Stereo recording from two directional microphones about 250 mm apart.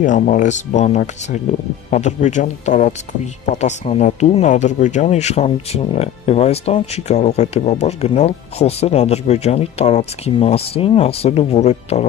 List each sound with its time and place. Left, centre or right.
0.0 s speech: left